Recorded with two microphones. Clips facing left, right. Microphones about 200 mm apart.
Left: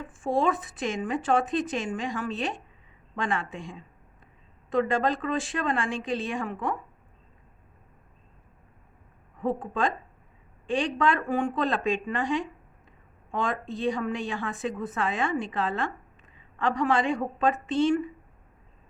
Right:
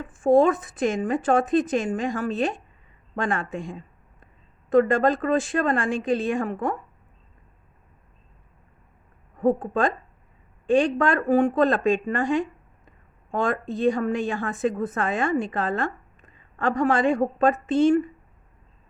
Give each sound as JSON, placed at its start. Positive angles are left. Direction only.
{"t": 0.0, "sound": "a woman's voice", "side_deg": -45}
{"t": 9.4, "sound": "a woman's voice", "side_deg": -45}